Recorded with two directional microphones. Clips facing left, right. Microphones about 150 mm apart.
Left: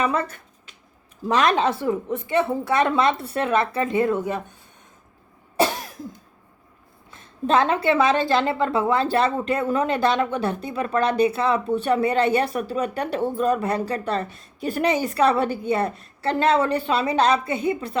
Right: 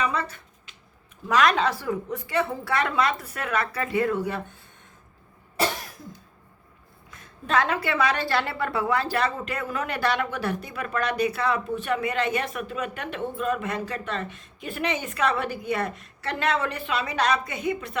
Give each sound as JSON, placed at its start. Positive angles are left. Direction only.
{"t": 0.0, "sound": "a sound", "side_deg": 50}
{"t": 1.2, "sound": "a woman's voice", "side_deg": 25}
{"t": 7.1, "sound": "a woman's voice", "side_deg": 25}